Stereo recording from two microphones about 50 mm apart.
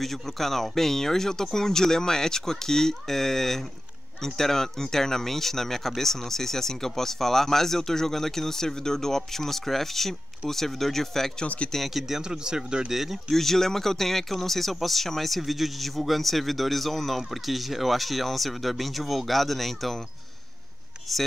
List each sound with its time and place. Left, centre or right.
0.0 s speech: centre
11.4 s speech: left
11.7 s speech: centre
12.2 s speech: centre
12.9 s speech: centre
21.1 s speech: centre